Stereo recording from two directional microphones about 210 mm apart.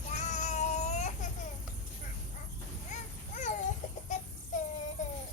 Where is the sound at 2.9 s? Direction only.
35° left (ahead or behind).